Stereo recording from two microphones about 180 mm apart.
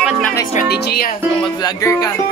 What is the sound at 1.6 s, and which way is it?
Music, 20° left (ahead or behind).